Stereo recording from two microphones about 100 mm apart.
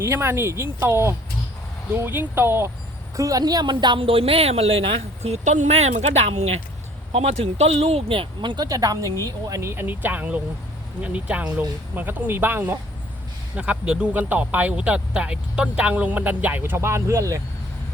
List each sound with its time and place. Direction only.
0.0 s speech: 25° right (ahead or behind)
3.2 s a woman's voice: 35° right (ahead or behind)